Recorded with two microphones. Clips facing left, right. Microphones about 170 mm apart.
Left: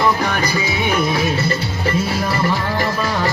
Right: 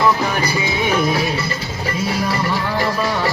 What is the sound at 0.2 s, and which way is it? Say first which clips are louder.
Music: even; 10° right (ahead or behind).